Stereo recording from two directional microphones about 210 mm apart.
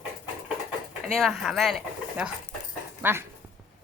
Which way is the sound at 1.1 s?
Centre (ahead or behind).